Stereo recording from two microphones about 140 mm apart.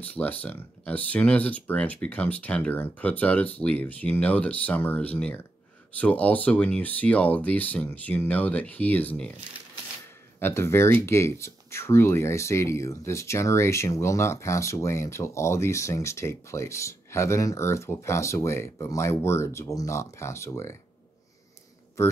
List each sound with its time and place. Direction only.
0.0 s speech: 10° left (ahead or behind)
10.4 s speech: 20° left (ahead or behind)